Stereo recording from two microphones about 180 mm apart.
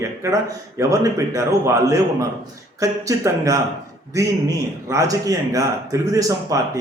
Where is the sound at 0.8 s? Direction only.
15° right (ahead or behind).